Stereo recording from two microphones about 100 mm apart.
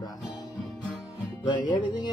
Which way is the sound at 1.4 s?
50° left (ahead or behind).